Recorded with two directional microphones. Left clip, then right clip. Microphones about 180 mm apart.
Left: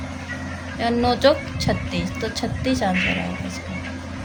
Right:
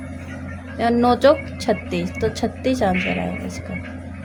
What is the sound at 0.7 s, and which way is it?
A woman's voice, 50° right (ahead or behind).